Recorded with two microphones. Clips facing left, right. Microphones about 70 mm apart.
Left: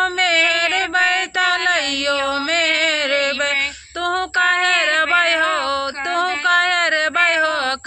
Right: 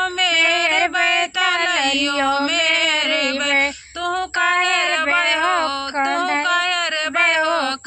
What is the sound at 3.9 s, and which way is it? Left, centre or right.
Female singing, left.